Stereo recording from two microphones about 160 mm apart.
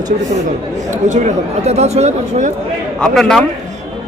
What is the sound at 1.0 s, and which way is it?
Speech, 45° right (ahead or behind).